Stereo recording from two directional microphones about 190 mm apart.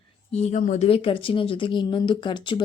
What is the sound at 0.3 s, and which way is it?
Speech, 35° left (ahead or behind).